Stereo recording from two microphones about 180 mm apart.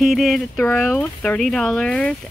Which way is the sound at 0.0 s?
Centre (ahead or behind).